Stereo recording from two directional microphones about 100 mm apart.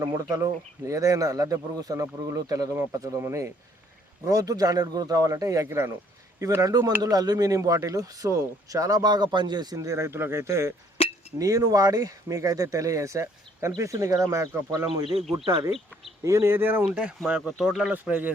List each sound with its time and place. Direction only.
0.0 s speech: 35° right (ahead or behind)
4.3 s speech: 35° right (ahead or behind)
11.0 s chink: 70° left (ahead or behind)
11.3 s speech: 35° right (ahead or behind)
16.2 s speech: 30° right (ahead or behind); by 17.9 s 5° right (ahead or behind)
17.9 s speech: 15° right (ahead or behind)